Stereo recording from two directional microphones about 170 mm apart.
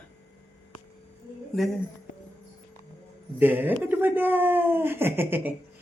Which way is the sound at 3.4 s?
10° right (ahead or behind).